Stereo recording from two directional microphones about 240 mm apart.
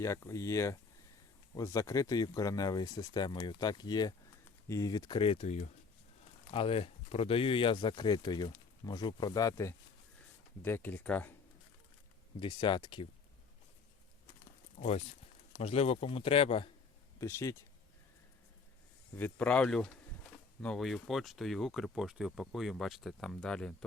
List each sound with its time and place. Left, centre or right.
0.0 s a man's voice: centre
12.4 s a man's voice: centre
14.8 s a man's voice: left
17.2 s speech: centre
19.1 s speech: centre